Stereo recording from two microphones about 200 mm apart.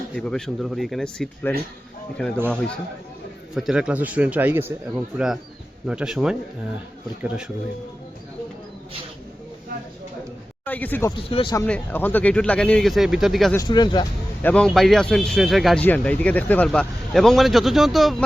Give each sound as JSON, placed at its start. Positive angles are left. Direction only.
{"t": 0.2, "sound": "speech", "side_deg": 5}
{"t": 3.5, "sound": "a man's voice", "side_deg": -5}
{"t": 10.7, "sound": "speech", "side_deg": 10}
{"t": 11.3, "sound": "speech", "side_deg": 25}
{"t": 11.5, "sound": "speech", "side_deg": 10}
{"t": 13.6, "sound": "speech", "side_deg": 20}
{"t": 14.4, "sound": "speech", "side_deg": 5}